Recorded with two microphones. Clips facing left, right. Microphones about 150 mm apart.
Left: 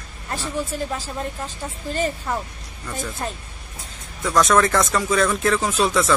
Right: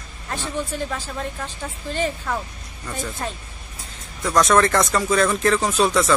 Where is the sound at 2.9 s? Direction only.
Centre (ahead or behind).